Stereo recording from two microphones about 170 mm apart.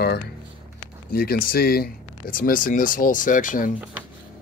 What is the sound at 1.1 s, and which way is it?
Speech, 60° left (ahead or behind).